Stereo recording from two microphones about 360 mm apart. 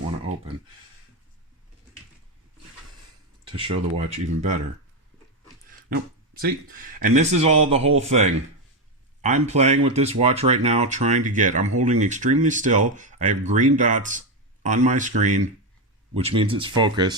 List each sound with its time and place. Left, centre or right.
3.4 s speech: centre
5.9 s speech: right